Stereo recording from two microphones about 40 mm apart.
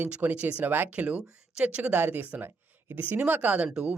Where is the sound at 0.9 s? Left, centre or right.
Right.